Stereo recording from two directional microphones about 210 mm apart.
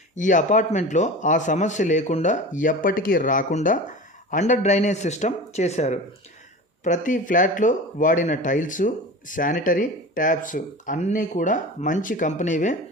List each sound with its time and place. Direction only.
0.2 s a man's voice: 35° left (ahead or behind)